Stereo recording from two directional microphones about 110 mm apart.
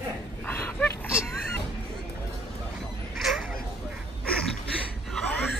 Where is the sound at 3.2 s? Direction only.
Centre (ahead or behind).